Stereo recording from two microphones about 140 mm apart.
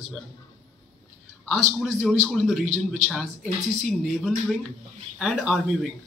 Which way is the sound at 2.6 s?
60° right (ahead or behind).